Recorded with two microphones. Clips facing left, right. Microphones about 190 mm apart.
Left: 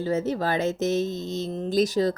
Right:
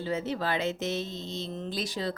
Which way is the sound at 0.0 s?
45° left (ahead or behind).